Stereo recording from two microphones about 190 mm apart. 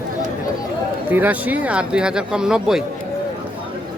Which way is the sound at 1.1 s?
10° right (ahead or behind).